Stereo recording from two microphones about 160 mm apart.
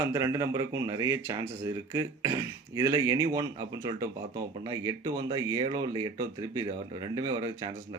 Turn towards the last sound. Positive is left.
turn(degrees=-25)  # may be behind; listen again after turning